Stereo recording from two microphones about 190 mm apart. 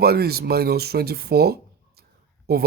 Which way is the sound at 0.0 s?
55° right (ahead or behind).